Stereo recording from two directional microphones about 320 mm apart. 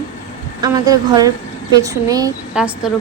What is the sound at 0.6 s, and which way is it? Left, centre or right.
A woman's voice, centre.